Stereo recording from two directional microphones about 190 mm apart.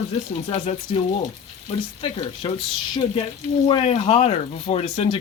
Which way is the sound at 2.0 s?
25° left (ahead or behind).